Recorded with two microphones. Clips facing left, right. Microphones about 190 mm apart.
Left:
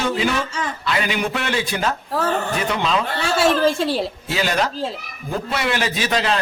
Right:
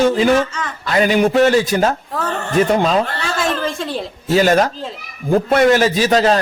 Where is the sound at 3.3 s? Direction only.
10° left (ahead or behind).